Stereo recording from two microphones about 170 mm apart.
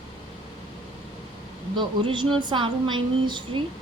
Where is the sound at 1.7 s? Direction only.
30° right (ahead or behind).